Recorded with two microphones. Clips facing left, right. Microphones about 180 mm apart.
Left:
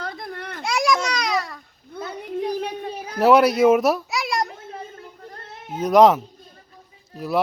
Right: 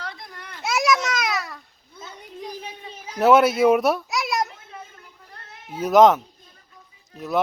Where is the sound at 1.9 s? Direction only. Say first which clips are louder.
Left 11 dB; 60° left (ahead or behind).